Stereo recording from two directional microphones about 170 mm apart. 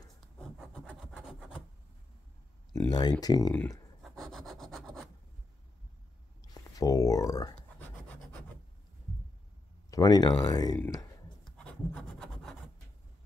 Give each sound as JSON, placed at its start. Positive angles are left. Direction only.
{"t": 0.2, "sound": "rub", "side_deg": 0}
{"t": 2.9, "sound": "speech", "side_deg": 25}
{"t": 4.0, "sound": "sawing", "side_deg": 0}
{"t": 6.4, "sound": "a sound", "side_deg": 20}
{"t": 9.8, "sound": "speech", "side_deg": 20}
{"t": 11.4, "sound": "a sound", "side_deg": 5}